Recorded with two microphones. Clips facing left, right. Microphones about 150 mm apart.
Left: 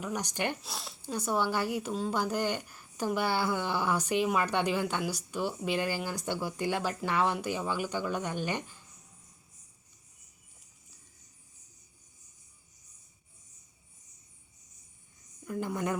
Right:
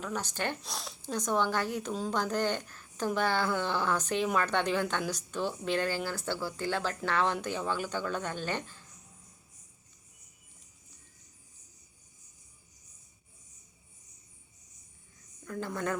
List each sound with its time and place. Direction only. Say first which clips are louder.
0.0 s speech: left 1 dB; 15° left (ahead or behind)
0.6 s speech: right 1 dB; centre (ahead or behind)
15.4 s a sound: left 1 dB; 15° left (ahead or behind)